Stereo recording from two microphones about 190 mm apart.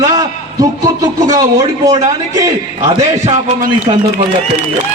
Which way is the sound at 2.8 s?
35° right (ahead or behind).